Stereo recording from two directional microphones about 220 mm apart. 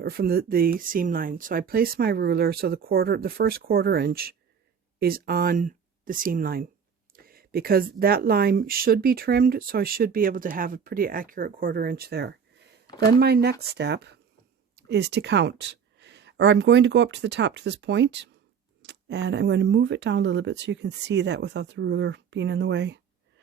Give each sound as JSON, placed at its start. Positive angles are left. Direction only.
{"t": 0.0, "sound": "speech", "side_deg": -45}